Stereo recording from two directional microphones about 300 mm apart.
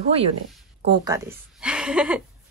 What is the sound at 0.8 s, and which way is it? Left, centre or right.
A woman's voice, centre.